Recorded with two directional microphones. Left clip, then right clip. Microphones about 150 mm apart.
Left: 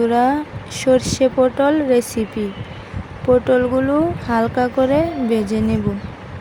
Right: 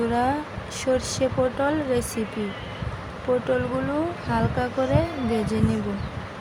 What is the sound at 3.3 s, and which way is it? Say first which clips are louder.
Speech: left 9 dB; 35° left (ahead or behind).